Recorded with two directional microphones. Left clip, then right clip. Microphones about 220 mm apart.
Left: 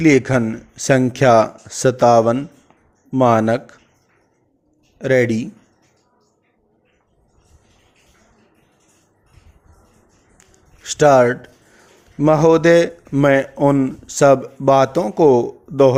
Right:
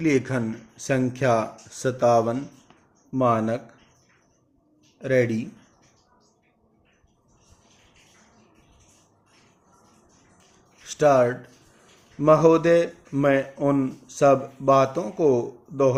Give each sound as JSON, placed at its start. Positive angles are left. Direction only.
{"t": 0.0, "sound": "speech", "side_deg": 40}
{"t": 4.9, "sound": "speech", "side_deg": 40}
{"t": 10.8, "sound": "speech", "side_deg": 45}